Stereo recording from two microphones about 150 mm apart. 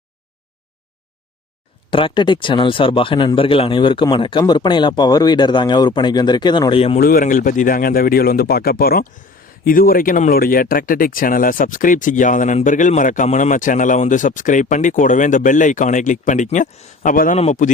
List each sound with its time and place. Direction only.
1.9 s speech: 35° left (ahead or behind)
7.0 s speech: 70° left (ahead or behind)
17.3 s a man's voice: 50° left (ahead or behind)